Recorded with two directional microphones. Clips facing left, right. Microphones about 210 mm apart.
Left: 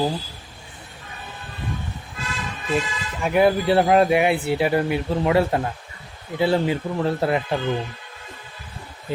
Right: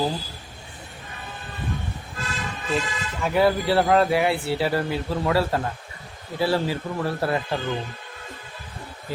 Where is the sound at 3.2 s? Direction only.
20° left (ahead or behind).